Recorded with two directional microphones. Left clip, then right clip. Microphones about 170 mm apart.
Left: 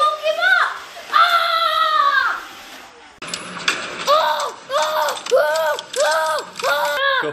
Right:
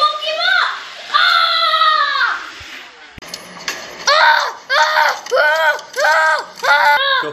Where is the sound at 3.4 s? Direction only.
40° left (ahead or behind).